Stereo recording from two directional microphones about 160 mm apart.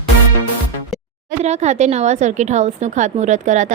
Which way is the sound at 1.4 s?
45° right (ahead or behind).